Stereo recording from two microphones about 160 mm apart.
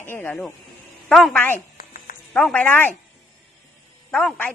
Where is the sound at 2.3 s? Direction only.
5° left (ahead or behind).